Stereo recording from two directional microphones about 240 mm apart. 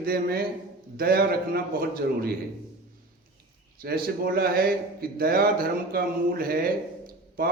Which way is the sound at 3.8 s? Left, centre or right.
Right.